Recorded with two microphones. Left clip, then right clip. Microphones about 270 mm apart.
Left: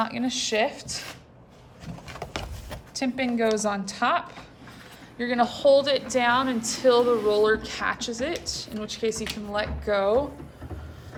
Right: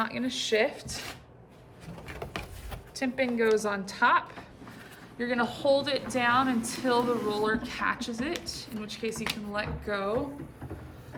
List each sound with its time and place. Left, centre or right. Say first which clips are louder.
0.0 s a woman's voice: left 4 dB; centre
2.9 s a woman's voice: left 2 dB; centre